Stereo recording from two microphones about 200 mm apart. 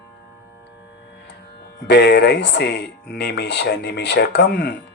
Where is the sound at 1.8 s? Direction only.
55° left (ahead or behind).